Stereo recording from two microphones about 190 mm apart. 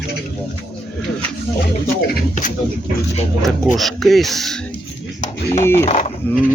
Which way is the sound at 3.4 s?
Centre (ahead or behind).